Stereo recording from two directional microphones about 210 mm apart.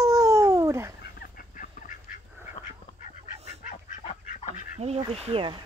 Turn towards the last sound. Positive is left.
turn(degrees=-25)  # may be behind; listen again after turning